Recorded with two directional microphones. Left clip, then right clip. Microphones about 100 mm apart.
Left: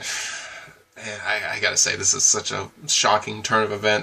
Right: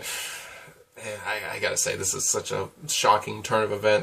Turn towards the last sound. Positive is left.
turn(degrees=-15)  # may be behind; listen again after turning